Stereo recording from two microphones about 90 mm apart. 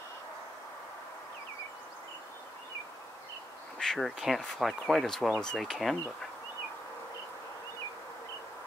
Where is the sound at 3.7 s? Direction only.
5° left (ahead or behind).